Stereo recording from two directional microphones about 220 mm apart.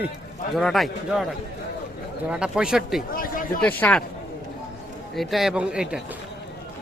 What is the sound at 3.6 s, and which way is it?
Speech, 10° left (ahead or behind).